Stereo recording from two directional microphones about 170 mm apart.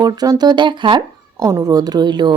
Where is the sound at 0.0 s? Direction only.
25° right (ahead or behind).